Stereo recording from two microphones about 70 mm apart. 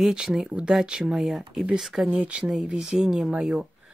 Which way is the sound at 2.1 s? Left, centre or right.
Centre.